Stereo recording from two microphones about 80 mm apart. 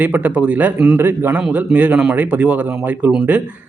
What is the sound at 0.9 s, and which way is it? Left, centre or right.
Speech, right.